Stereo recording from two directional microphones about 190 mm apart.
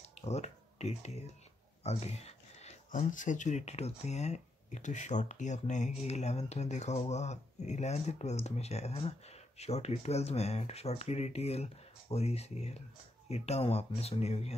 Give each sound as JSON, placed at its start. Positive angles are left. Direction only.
{"t": 0.2, "sound": "speech", "side_deg": 35}